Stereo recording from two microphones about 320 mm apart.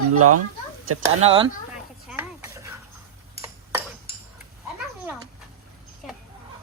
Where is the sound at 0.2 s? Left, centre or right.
Right.